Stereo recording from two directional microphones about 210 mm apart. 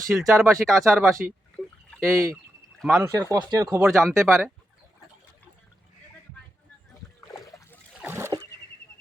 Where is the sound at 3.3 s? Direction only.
15° right (ahead or behind).